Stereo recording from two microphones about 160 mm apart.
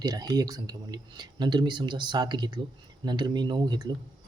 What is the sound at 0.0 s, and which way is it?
Speech, 25° right (ahead or behind).